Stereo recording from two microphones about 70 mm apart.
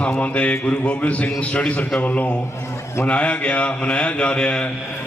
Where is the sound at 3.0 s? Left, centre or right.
Centre.